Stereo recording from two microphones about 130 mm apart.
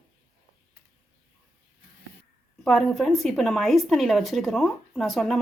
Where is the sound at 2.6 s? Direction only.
Centre (ahead or behind).